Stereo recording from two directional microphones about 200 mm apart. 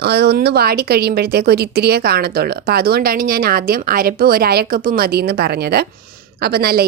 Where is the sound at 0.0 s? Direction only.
55° right (ahead or behind).